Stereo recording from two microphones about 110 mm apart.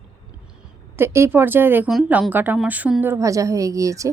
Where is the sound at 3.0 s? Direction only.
25° right (ahead or behind).